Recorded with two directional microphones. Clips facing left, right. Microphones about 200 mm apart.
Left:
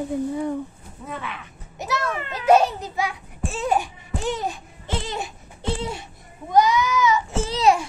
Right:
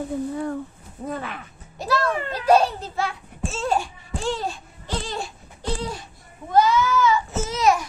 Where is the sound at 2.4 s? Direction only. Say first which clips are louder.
Left 1 dB; 20° left (ahead or behind).